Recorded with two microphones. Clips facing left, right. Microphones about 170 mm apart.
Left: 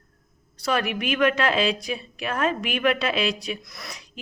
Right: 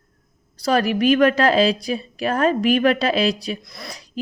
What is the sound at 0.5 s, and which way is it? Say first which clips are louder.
Speech: right 6 dB; 35° right (ahead or behind).